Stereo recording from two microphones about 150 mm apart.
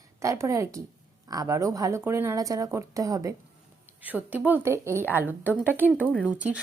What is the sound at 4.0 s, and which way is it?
A woman's voice, 10° right (ahead or behind).